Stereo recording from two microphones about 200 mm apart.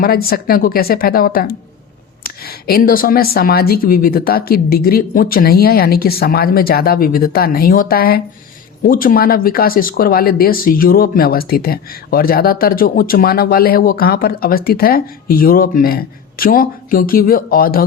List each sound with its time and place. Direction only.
0.0 s speech: 50° left (ahead or behind)